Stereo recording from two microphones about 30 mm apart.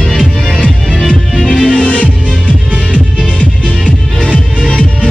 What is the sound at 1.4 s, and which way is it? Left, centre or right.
Music, centre.